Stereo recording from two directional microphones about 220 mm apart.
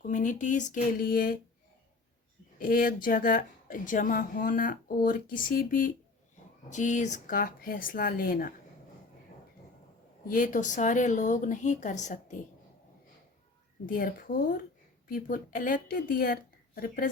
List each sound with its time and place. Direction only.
0.0 s a woman's voice: 35° left (ahead or behind)
2.6 s a woman's voice: 40° left (ahead or behind)
10.2 s a woman's voice: 35° left (ahead or behind)
13.8 s a woman's voice: 40° left (ahead or behind)